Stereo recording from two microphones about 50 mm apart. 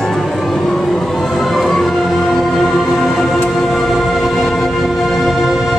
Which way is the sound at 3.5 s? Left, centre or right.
Centre.